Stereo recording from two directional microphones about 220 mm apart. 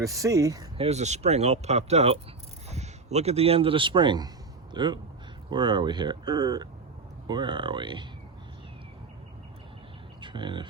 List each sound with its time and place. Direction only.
0.0 s speech: 15° right (ahead or behind)
0.9 s speech: 30° right (ahead or behind)
10.2 s a sound: 20° right (ahead or behind)